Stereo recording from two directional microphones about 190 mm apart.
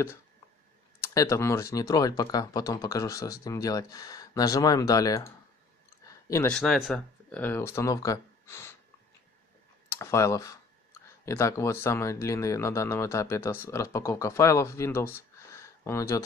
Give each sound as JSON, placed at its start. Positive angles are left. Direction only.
{"t": 1.0, "sound": "speech", "side_deg": 15}
{"t": 6.5, "sound": "speech", "side_deg": 0}
{"t": 9.8, "sound": "speech", "side_deg": 15}